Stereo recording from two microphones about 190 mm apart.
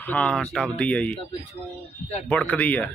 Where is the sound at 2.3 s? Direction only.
5° left (ahead or behind).